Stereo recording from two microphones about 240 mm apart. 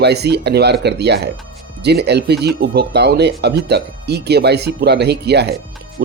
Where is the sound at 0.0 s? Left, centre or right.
Right.